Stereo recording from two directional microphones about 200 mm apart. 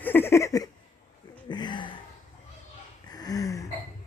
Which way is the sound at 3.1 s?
20° left (ahead or behind).